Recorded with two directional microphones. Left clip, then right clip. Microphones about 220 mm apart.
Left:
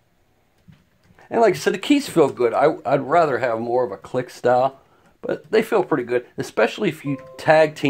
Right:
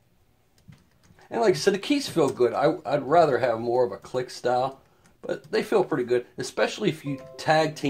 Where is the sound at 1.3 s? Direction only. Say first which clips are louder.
Left 5 dB; 45° left (ahead or behind).